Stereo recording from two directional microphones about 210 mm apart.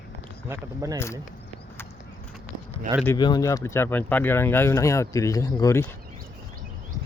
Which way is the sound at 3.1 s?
20° left (ahead or behind).